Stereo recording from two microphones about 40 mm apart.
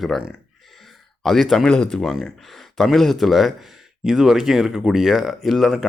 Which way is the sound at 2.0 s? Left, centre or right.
Centre.